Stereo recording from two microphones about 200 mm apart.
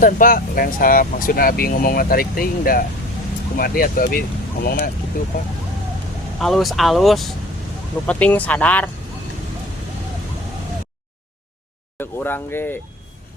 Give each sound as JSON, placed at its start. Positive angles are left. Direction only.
{"t": 0.0, "sound": "speech", "side_deg": 45}
{"t": 6.4, "sound": "speech", "side_deg": 0}
{"t": 11.9, "sound": "speech", "side_deg": 10}